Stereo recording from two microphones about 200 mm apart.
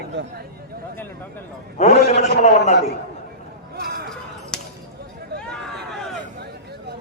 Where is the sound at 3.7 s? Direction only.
50° right (ahead or behind).